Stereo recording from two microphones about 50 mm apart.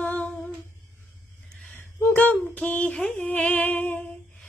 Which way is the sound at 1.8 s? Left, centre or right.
Left.